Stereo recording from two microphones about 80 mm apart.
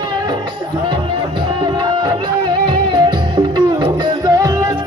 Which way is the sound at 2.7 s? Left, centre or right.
Right.